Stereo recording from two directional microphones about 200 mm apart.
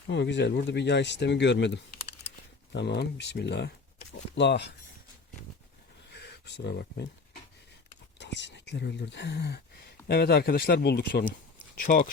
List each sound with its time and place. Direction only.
0.1 s speech: 60° left (ahead or behind)
6.1 s a sound: 55° left (ahead or behind)
8.2 s speech: 60° left (ahead or behind); by 12.0 s 45° left (ahead or behind)